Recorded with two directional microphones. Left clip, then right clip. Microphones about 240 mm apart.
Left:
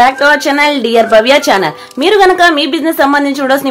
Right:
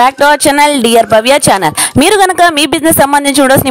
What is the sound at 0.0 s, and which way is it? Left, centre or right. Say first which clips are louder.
Speech: right 1 dB; right.